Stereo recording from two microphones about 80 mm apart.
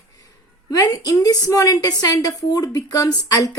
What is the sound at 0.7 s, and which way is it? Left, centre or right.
A woman's voice, left.